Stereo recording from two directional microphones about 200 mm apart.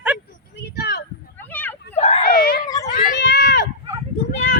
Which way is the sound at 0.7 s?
55° left (ahead or behind).